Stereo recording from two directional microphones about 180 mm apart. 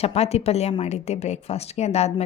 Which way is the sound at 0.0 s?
35° left (ahead or behind).